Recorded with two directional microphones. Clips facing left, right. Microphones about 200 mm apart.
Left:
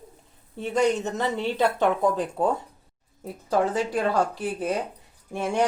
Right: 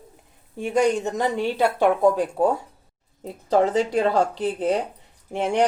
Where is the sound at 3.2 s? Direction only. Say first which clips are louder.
Right 4 dB; 20° right (ahead or behind).